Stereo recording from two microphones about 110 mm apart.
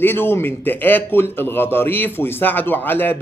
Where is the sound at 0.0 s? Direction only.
20° left (ahead or behind).